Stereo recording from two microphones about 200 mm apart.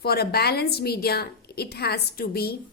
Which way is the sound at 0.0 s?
50° left (ahead or behind).